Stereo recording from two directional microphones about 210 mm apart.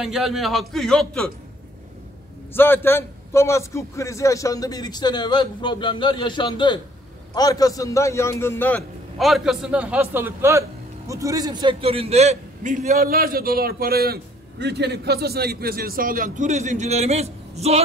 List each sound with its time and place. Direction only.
0.0 s a man's voice: centre (ahead or behind)
2.5 s a man's voice: 10° left (ahead or behind); by 17.8 s 30° right (ahead or behind)